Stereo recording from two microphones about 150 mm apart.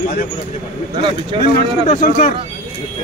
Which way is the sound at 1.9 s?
60° left (ahead or behind).